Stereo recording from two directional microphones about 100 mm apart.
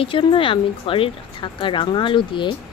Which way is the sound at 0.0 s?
60° left (ahead or behind).